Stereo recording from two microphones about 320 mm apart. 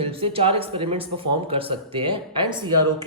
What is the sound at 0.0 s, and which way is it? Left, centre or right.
A man's voice, centre.